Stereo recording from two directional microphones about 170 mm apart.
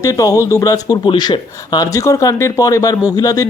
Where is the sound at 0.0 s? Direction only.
20° left (ahead or behind).